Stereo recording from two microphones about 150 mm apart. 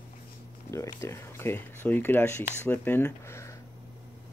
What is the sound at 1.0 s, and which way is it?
Speech, 15° left (ahead or behind).